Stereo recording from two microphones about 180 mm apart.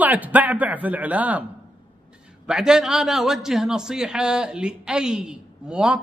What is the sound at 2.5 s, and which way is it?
A man's voice, 5° right (ahead or behind).